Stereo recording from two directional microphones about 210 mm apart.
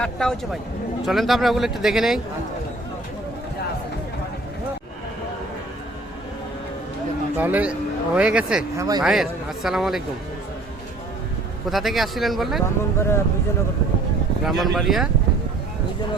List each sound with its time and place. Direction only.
0.0 s speech: 5° left (ahead or behind)
7.3 s speech: 5° right (ahead or behind)
8.8 s speech: 20° right (ahead or behind)
9.0 s speech: centre (ahead or behind)
11.7 s speech: centre (ahead or behind)
13.0 s speech: 10° left (ahead or behind)
14.4 s speech: centre (ahead or behind)